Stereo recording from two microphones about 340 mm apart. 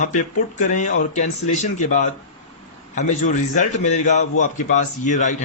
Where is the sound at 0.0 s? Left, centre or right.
Left.